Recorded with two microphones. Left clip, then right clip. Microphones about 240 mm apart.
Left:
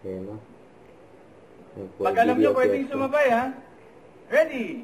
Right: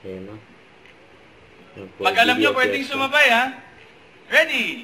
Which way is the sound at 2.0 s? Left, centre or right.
Centre.